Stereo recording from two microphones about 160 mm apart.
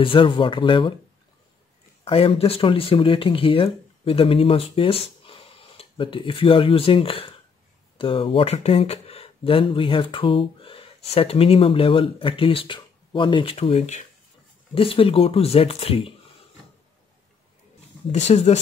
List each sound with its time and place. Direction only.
0.0 s speech: 35° left (ahead or behind)
2.0 s speech: 35° left (ahead or behind)
14.7 s speech: 35° left (ahead or behind)
18.1 s speech: 40° left (ahead or behind)